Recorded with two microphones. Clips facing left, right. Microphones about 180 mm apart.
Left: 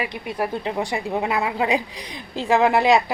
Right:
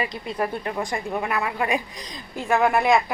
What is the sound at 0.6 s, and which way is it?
A woman's voice, 20° left (ahead or behind).